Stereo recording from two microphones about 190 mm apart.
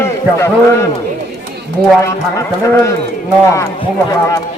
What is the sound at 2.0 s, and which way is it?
A man's voice, 15° left (ahead or behind).